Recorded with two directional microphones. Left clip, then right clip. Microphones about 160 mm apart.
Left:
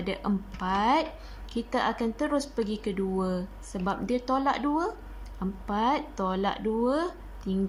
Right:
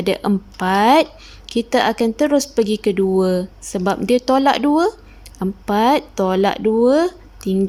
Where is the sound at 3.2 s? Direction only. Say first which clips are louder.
Right 14 dB; 45° right (ahead or behind).